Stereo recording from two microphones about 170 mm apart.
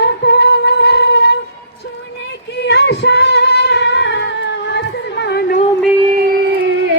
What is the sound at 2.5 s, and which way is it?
Female singing, 80° left.